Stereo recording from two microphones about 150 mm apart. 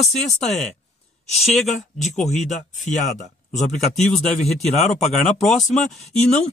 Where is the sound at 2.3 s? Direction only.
50° left (ahead or behind).